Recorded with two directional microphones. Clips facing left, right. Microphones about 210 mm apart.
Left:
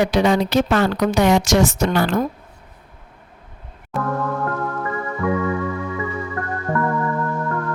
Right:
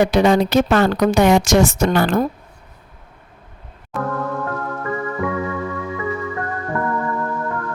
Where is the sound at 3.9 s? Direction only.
Centre (ahead or behind).